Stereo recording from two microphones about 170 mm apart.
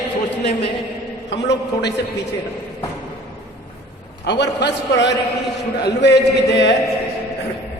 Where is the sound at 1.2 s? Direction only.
90° left.